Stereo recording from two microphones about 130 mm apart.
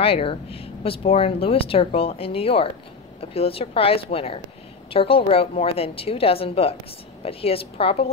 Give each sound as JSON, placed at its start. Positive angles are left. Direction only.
{"t": 0.0, "sound": "speech", "side_deg": 45}